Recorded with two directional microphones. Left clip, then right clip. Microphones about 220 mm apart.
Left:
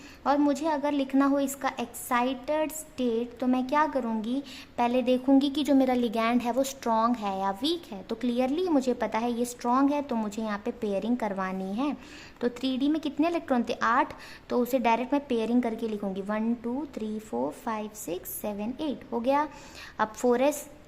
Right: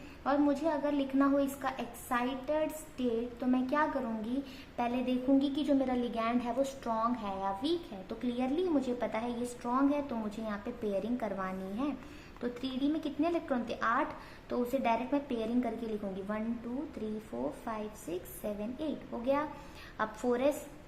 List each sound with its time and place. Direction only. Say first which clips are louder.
0.3 s a woman's voice: left 5 dB; 45° left (ahead or behind)